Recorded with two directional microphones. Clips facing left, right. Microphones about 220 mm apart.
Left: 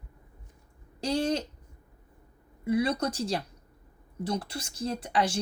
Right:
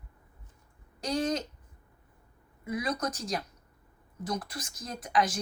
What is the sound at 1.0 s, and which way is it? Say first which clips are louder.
Speech: left 2 dB; 30° left (ahead or behind).